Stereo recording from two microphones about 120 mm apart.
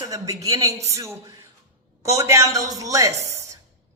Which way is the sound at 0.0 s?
30° right (ahead or behind).